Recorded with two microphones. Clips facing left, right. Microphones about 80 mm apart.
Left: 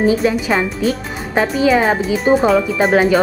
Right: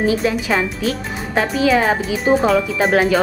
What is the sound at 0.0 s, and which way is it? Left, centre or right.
A woman's voice, centre.